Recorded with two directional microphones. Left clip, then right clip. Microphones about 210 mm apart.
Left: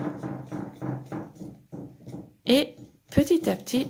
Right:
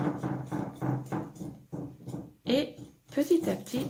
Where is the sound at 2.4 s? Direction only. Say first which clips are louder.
Left 6 dB; 45° left (ahead or behind).